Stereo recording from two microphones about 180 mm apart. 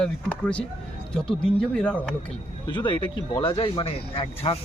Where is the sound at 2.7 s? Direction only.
25° left (ahead or behind).